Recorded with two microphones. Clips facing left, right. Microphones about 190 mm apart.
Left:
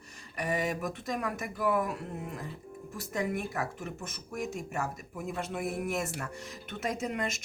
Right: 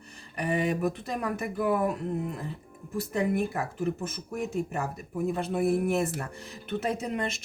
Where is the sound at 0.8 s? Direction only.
35° right (ahead or behind).